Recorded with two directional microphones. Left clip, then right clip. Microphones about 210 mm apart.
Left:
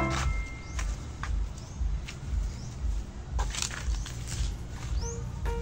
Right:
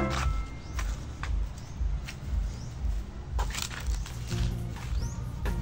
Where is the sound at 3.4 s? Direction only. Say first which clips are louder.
Left 1 dB; 30° right (ahead or behind).